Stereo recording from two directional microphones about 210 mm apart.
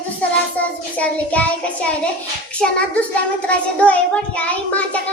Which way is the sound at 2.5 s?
5° left (ahead or behind).